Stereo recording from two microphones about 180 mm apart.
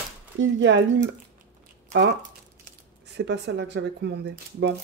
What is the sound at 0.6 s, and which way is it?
Speech, 90° right.